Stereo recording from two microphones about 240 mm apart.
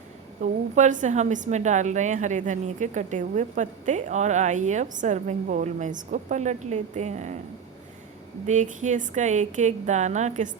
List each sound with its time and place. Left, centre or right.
0.4 s a woman's voice: right
8.4 s a woman's voice: right